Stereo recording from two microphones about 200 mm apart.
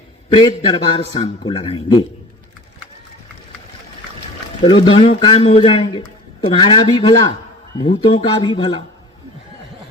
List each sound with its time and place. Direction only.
0.3 s a man's voice: 25° left (ahead or behind)
4.9 s a man's voice: 25° left (ahead or behind)